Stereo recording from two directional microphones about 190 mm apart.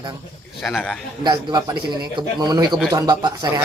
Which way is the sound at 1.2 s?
25° right (ahead or behind).